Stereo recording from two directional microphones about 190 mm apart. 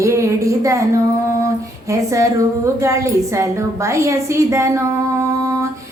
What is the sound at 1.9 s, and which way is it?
A woman's voice, 15° right (ahead or behind).